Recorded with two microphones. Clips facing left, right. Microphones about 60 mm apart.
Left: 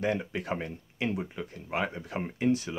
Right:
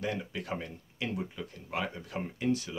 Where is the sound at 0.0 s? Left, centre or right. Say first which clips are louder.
Left 5 dB; left.